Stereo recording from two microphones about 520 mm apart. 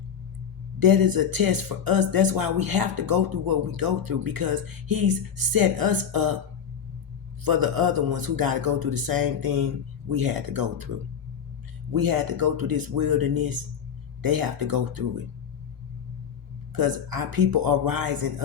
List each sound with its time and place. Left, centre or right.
0.8 s speech: right
7.4 s speech: right
11.9 s speech: right
16.7 s speech: right